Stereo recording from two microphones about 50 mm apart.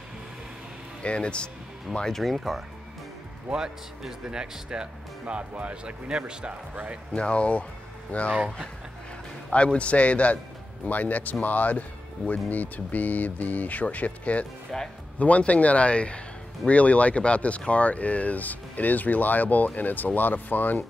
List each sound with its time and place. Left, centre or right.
1.0 s speech: left
2.0 s speech: centre
3.4 s speech: centre
6.7 s speech: right
7.2 s speech: left
9.5 s speech: left
14.7 s speech: centre
15.1 s speech: left